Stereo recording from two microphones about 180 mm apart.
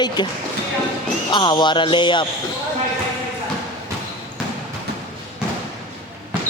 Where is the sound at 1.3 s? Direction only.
25° left (ahead or behind).